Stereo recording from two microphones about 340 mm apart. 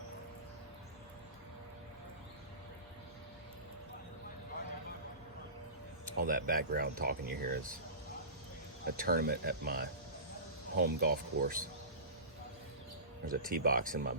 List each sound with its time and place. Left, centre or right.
6.1 s speech: right
9.0 s speech: right
13.2 s speech: right